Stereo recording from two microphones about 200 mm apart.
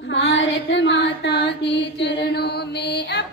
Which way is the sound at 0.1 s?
65° left (ahead or behind).